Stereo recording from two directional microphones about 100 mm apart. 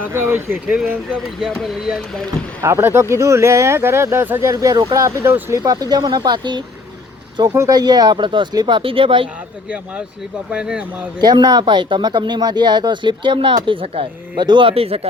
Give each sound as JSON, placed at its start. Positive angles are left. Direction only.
{"t": 0.0, "sound": "speech", "side_deg": -25}
{"t": 1.6, "sound": "speech", "side_deg": 0}
{"t": 2.6, "sound": "speech", "side_deg": -25}
{"t": 5.5, "sound": "speech", "side_deg": -40}
{"t": 7.5, "sound": "speech", "side_deg": -30}
{"t": 7.8, "sound": "speech", "side_deg": -40}
{"t": 9.6, "sound": "speech", "side_deg": -10}
{"t": 11.2, "sound": "speech", "side_deg": -45}
{"t": 14.3, "sound": "speech", "side_deg": -50}